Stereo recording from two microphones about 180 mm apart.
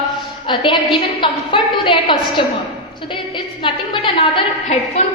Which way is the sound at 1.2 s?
25° left (ahead or behind).